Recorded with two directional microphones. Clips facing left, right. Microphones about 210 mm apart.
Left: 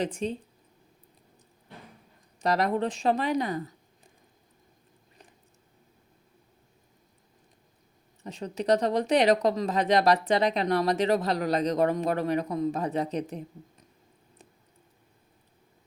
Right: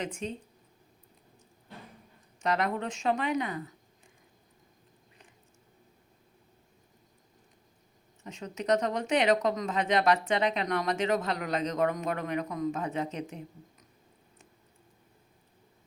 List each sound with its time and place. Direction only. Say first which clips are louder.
0.0 s speech: left 6 dB; 35° left (ahead or behind)
2.4 s speech: left 4 dB; 35° left (ahead or behind)
8.2 s speech: left 5 dB; 35° left (ahead or behind)